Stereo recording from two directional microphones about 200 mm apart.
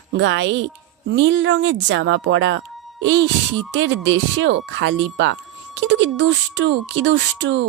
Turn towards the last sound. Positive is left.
turn(degrees=-65)  # may be behind; listen again after turning